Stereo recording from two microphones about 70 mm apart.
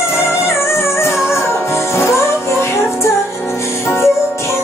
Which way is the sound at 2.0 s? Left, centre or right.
Left.